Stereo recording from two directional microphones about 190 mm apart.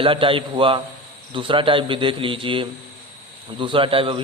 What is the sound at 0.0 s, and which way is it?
A man's voice, 30° right (ahead or behind).